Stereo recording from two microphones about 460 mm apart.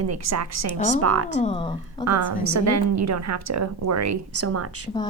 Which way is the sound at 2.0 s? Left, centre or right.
Right.